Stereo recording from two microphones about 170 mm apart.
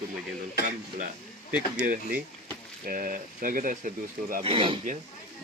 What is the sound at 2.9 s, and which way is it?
Speech, 55° right (ahead or behind).